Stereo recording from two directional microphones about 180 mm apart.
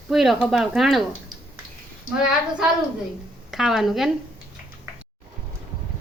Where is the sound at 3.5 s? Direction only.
Centre (ahead or behind).